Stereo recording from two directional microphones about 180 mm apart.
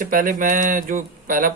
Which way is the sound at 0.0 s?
50° right (ahead or behind).